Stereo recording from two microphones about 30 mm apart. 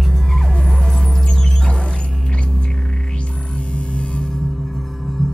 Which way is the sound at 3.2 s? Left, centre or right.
Left.